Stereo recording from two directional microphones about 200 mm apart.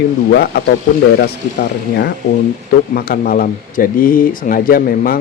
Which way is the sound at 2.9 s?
45° left (ahead or behind).